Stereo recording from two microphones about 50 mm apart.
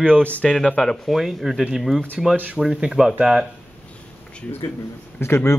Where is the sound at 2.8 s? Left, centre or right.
Centre.